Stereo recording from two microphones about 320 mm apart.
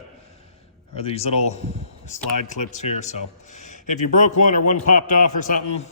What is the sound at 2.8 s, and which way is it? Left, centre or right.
A man's voice, left.